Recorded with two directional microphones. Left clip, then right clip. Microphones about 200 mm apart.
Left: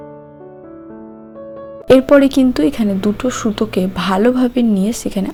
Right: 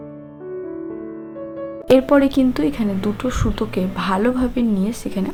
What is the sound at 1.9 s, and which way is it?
Speech, 25° left (ahead or behind).